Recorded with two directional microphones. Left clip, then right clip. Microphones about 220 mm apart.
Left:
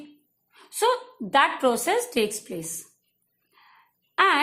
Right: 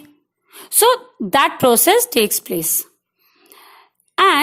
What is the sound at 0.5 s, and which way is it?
A woman's voice, 45° right (ahead or behind).